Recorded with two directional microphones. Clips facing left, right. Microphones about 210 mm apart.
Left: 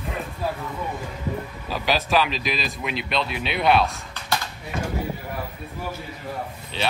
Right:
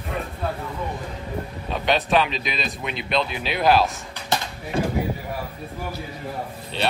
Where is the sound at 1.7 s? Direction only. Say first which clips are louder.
Right 2 dB; centre (ahead or behind).